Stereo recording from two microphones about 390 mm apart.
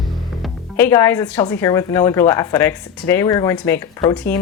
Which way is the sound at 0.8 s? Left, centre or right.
Centre.